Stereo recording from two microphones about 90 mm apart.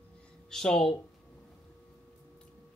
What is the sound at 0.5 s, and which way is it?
Speech, 5° left (ahead or behind).